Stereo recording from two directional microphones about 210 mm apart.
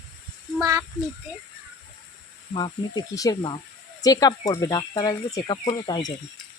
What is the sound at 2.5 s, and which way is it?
Speech, 20° left (ahead or behind).